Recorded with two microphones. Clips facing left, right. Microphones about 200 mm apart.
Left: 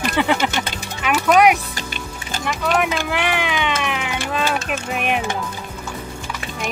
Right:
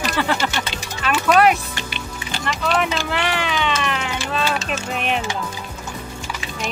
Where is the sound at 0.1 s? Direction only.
15° left (ahead or behind).